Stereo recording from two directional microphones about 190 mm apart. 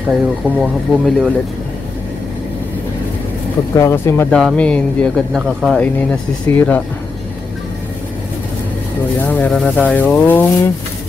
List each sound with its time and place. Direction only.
0.1 s speech: 5° right (ahead or behind)
3.7 s speech: 15° left (ahead or behind)
6.5 s speech: 10° left (ahead or behind)
9.3 s speech: 5° left (ahead or behind)